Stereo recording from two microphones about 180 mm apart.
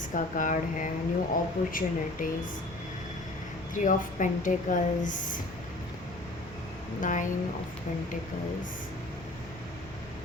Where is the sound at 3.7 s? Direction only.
45° left (ahead or behind).